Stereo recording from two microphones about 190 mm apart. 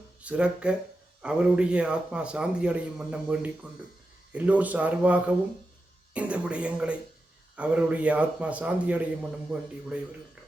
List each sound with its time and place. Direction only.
0.2 s a man's voice: 5° right (ahead or behind)